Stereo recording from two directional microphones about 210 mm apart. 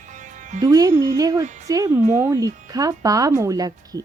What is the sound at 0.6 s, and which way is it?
A woman's voice, 15° right (ahead or behind).